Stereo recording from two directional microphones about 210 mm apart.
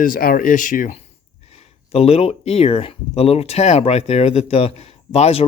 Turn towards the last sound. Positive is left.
turn(degrees=30)  # may be behind; listen again after turning